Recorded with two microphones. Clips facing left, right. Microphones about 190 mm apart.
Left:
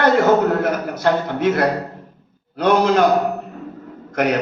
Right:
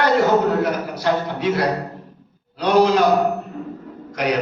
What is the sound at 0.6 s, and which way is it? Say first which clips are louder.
A man's voice: left 2 dB; 50° left (ahead or behind).